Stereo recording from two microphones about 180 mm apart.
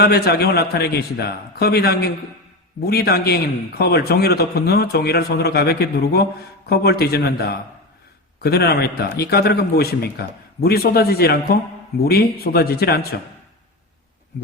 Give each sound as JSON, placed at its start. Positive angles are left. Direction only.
{"t": 0.0, "sound": "a man's voice", "side_deg": 60}